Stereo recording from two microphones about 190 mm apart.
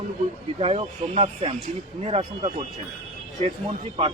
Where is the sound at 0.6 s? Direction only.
35° right (ahead or behind).